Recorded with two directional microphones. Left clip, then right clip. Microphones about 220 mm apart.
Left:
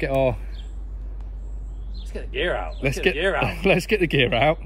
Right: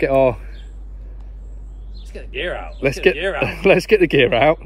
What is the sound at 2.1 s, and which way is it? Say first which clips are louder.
A man's voice: even; 40° right (ahead or behind).